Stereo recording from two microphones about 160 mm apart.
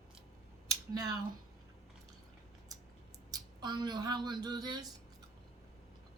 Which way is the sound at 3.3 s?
25° right (ahead or behind).